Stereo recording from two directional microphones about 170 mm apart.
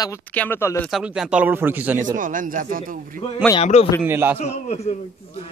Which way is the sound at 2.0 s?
50° right (ahead or behind).